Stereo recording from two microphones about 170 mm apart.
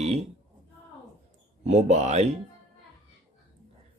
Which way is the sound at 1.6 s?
40° right (ahead or behind).